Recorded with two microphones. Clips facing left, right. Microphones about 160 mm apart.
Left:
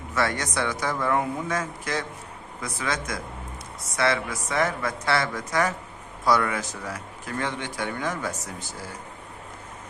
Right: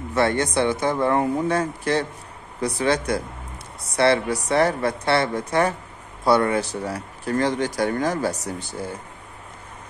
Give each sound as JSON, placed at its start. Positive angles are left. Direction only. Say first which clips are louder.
{"t": 0.1, "sound": "speech", "louder": "right 6 dB", "side_deg": -30}
{"t": 8.5, "sound": "speech", "louder": "right 7 dB", "side_deg": -60}